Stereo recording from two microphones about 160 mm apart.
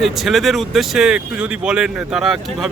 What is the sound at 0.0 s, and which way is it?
Speech, centre (ahead or behind).